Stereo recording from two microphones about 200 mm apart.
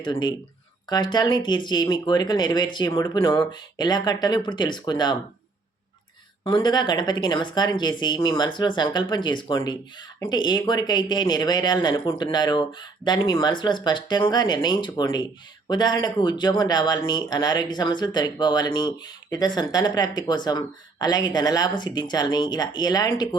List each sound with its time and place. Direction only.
0.1 s speech: 20° left (ahead or behind)
6.4 s speech: 20° left (ahead or behind)